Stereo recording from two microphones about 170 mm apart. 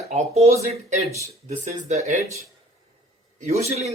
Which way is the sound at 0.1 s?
40° right (ahead or behind).